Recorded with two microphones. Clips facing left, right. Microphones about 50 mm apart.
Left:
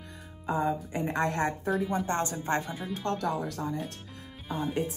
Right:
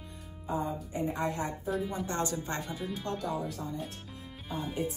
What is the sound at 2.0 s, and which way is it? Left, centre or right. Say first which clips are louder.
Speech: left 4 dB; left.